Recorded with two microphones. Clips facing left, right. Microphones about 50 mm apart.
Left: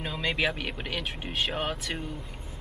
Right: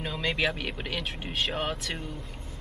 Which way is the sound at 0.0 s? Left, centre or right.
Centre.